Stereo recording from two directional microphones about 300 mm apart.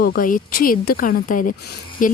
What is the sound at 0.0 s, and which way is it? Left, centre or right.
Speech, left.